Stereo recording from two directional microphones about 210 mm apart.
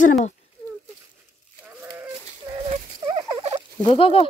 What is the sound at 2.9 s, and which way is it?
Gobble, 20° right (ahead or behind).